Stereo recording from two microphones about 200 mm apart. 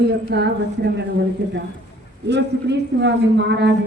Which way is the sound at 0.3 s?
60° right (ahead or behind).